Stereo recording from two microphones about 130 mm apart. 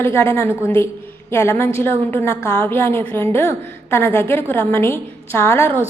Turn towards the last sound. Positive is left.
turn(degrees=20)  # may be behind; listen again after turning